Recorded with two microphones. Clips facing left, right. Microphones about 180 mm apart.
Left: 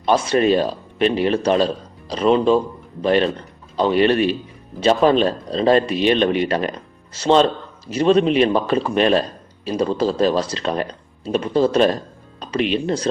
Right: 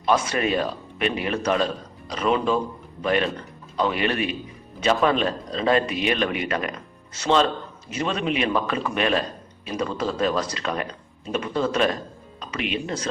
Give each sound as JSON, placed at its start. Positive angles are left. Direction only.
{"t": 0.0, "sound": "a man's voice", "side_deg": 30}